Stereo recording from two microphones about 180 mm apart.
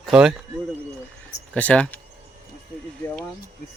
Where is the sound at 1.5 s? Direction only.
5° left (ahead or behind).